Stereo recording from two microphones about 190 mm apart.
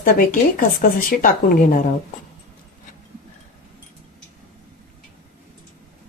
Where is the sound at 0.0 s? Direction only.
50° left (ahead or behind).